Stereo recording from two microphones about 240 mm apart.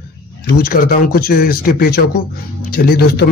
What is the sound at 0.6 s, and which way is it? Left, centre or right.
Speech, left.